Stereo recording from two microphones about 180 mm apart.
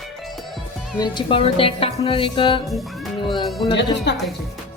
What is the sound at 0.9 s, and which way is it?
Speech, 25° left (ahead or behind).